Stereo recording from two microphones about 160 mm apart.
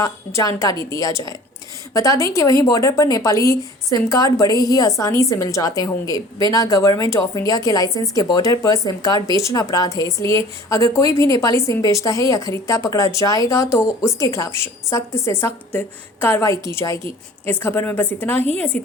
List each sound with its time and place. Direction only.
0.0 s a woman's voice: 20° left (ahead or behind)